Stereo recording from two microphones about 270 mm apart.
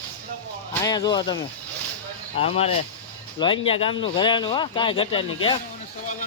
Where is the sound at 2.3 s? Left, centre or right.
Left.